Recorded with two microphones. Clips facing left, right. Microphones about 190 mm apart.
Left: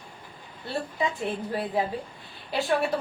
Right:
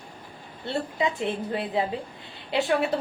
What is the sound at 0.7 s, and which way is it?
A woman's voice, 20° right (ahead or behind).